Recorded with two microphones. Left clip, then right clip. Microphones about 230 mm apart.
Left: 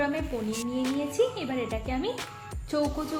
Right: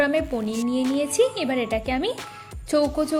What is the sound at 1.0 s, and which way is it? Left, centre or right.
Speech, right.